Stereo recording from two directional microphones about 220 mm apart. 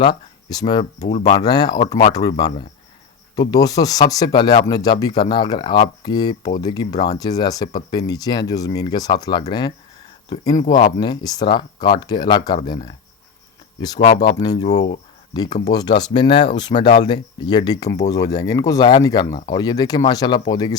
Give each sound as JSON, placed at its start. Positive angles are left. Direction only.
{"t": 0.0, "sound": "speech", "side_deg": 20}
{"t": 14.5, "sound": "speech", "side_deg": 30}
{"t": 15.3, "sound": "speech", "side_deg": 20}